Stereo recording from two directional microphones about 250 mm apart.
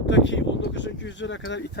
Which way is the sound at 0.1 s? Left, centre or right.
Left.